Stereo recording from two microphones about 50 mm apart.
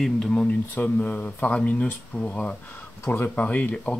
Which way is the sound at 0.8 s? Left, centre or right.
Left.